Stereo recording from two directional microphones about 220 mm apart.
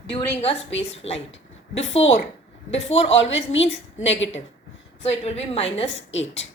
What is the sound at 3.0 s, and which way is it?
A woman's voice, 60° left (ahead or behind).